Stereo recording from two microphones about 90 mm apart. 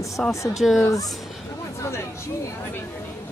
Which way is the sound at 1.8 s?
30° left (ahead or behind).